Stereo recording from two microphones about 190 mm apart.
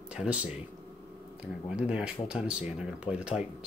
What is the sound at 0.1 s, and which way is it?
Speech, 5° right (ahead or behind).